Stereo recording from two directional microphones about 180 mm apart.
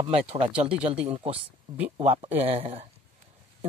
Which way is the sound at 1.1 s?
30° right (ahead or behind).